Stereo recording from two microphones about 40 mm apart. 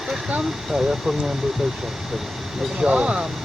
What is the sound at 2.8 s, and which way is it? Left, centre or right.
Speech, right.